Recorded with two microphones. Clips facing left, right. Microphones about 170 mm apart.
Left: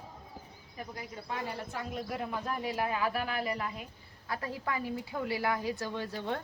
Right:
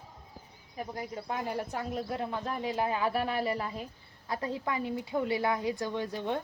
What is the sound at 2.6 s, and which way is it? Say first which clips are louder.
A woman's voice: right 3 dB; 25° right (ahead or behind).